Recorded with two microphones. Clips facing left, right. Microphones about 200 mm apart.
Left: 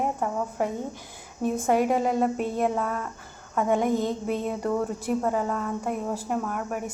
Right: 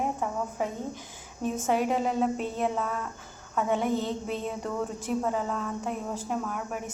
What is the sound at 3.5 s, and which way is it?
Speech, 45° left (ahead or behind).